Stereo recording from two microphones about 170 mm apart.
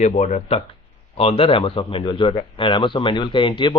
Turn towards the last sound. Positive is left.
turn(degrees=30)  # may be behind; listen again after turning